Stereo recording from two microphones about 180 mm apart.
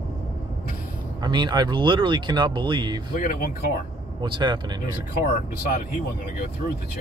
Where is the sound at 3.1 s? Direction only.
50° left (ahead or behind).